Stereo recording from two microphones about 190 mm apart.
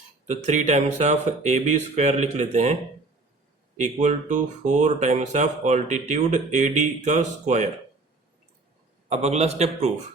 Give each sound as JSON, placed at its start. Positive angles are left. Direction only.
{"t": 0.3, "sound": "speech", "side_deg": -40}
{"t": 3.8, "sound": "speech", "side_deg": -40}
{"t": 9.0, "sound": "speech", "side_deg": -35}